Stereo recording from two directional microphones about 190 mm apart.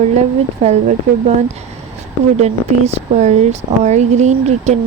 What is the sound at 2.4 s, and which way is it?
Speech, 35° right (ahead or behind).